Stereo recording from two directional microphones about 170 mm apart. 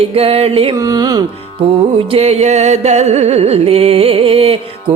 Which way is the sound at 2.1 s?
40° right (ahead or behind).